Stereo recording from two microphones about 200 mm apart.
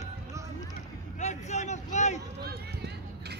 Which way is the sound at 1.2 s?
35° left (ahead or behind).